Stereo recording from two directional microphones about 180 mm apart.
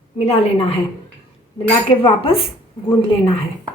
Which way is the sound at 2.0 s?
30° left (ahead or behind).